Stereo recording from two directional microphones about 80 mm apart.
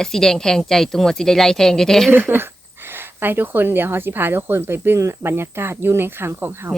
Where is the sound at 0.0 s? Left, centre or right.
Centre.